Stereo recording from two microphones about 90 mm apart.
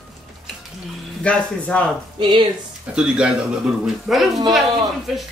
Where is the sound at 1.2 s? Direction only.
15° left (ahead or behind).